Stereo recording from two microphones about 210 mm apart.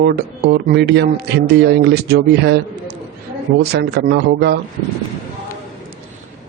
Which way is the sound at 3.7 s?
50° right (ahead or behind).